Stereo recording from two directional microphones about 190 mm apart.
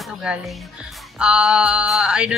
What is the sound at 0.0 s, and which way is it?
A woman's voice, centre (ahead or behind).